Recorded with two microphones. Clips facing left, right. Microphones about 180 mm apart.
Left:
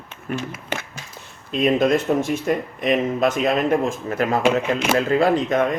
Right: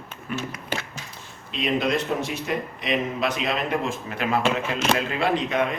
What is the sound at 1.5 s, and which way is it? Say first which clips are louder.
Speech: left 6 dB; 50° left (ahead or behind).